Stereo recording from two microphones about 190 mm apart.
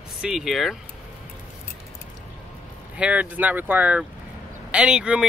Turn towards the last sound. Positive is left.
turn(degrees=-5)  # may be behind; listen again after turning